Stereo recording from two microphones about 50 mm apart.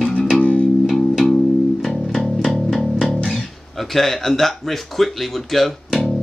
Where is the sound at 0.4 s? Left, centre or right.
Left.